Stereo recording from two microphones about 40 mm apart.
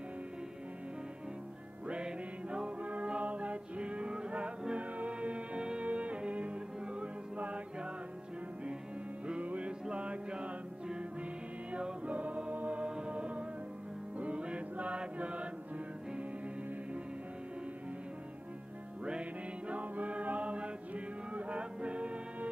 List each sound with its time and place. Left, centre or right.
1.9 s music: right
2.8 s music: right
9.4 s music: right
19.7 s chant: right